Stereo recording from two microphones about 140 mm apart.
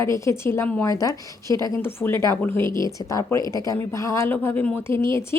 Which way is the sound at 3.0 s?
25° left (ahead or behind).